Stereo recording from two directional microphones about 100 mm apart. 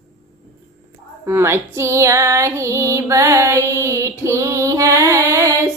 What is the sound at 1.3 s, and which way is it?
Female singing, 25° right (ahead or behind).